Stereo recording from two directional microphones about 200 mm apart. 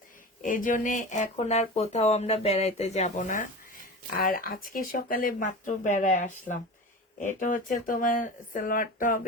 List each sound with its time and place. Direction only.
0.4 s speech: 40° left (ahead or behind)